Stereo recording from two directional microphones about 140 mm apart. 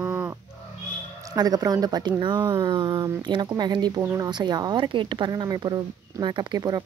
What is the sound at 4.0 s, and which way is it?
Speech, 20° right (ahead or behind).